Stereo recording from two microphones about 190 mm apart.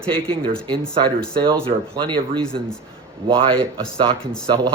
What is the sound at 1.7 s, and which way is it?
Speech, 45° right (ahead or behind).